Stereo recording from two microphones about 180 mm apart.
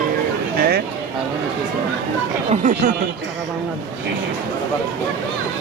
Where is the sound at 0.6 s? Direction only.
60° right (ahead or behind).